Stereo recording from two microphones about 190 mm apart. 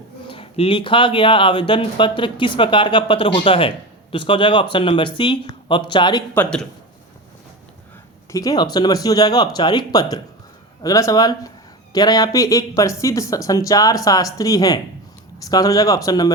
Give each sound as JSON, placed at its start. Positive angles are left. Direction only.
{"t": 0.3, "sound": "speech", "side_deg": 30}
{"t": 6.3, "sound": "speech", "side_deg": 5}
{"t": 8.3, "sound": "speech", "side_deg": 20}